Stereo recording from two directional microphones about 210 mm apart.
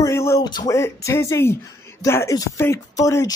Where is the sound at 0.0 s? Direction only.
15° left (ahead or behind).